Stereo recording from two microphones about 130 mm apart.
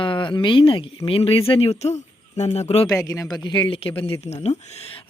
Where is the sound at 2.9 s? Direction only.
25° left (ahead or behind); by 4.5 s 50° left (ahead or behind).